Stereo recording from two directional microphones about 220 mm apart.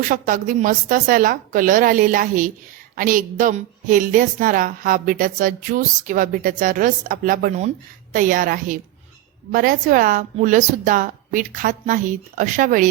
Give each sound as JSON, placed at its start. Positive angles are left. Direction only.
{"t": 0.1, "sound": "a woman's voice", "side_deg": -35}